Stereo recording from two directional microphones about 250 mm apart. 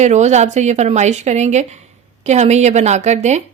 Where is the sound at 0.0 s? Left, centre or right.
Right.